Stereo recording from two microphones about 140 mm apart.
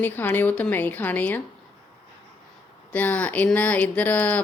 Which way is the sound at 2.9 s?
10° left (ahead or behind).